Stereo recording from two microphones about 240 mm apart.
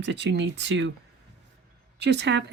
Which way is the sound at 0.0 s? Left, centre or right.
Right.